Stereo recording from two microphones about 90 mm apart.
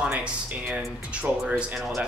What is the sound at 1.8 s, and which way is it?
Speech, centre (ahead or behind).